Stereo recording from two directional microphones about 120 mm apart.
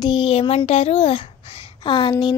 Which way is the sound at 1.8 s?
40° left (ahead or behind).